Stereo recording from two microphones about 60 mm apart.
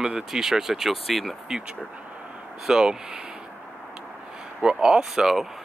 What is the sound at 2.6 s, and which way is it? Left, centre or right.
Speech, centre.